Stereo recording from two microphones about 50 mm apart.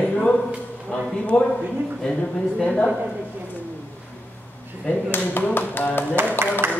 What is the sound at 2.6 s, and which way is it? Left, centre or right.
Speech, centre.